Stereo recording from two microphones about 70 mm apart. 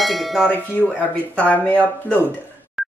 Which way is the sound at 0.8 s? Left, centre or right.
Left.